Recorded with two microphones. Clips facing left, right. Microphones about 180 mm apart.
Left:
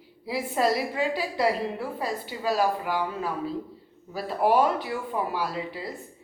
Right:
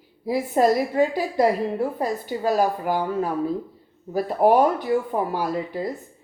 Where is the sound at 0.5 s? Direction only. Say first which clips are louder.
Right 6 dB; 45° right (ahead or behind).